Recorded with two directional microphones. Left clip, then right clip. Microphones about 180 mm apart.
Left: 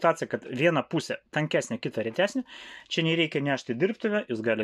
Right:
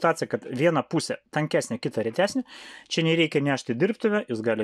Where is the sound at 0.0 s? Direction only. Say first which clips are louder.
Right 1 dB; 35° right (ahead or behind).